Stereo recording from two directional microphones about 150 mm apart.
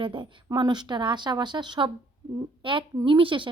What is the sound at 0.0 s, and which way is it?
A woman's voice, 35° right (ahead or behind).